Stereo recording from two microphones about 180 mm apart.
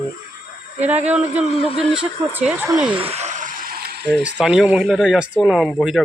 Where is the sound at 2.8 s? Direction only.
30° right (ahead or behind); by 4.0 s 60° right (ahead or behind).